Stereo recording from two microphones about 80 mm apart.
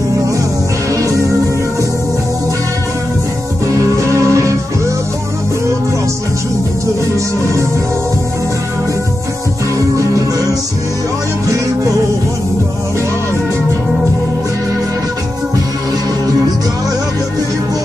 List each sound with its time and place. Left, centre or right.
3.9 s music: right
9.8 s music: right
11.4 s music: right